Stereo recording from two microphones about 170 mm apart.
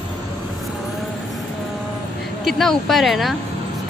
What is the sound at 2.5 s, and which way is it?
Speech, centre (ahead or behind).